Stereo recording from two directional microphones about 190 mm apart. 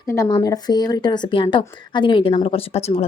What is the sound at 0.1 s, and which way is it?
Speech, 20° left (ahead or behind).